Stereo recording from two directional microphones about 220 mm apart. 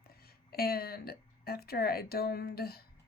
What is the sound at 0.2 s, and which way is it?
Speech, 45° left (ahead or behind).